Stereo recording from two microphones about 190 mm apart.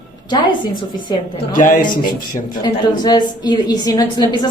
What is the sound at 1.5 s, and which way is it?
Speech, 45° left (ahead or behind).